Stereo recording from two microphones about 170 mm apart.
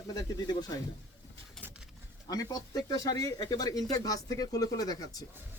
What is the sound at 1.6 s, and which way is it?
Pigeon, 5° left (ahead or behind).